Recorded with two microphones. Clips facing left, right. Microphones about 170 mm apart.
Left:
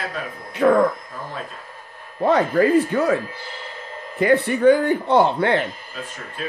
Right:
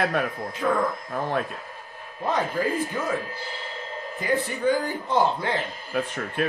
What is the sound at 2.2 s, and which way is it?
Speech, 70° left (ahead or behind).